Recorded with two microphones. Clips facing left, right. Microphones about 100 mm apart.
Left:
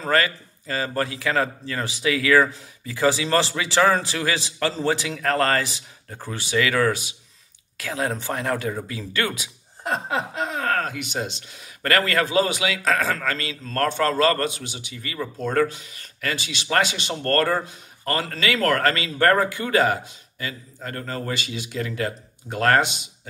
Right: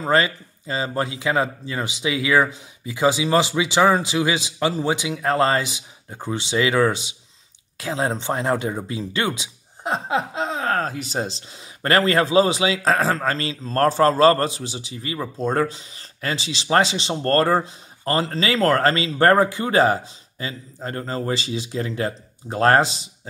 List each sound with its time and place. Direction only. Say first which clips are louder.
0.0 s speech: right 2 dB; 20° right (ahead or behind)